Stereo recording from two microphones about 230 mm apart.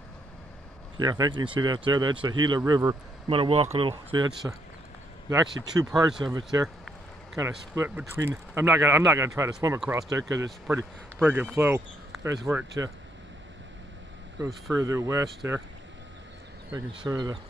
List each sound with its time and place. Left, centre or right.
0.9 s speech: centre
5.7 s speech: centre
14.4 s speech: centre
16.7 s speech: centre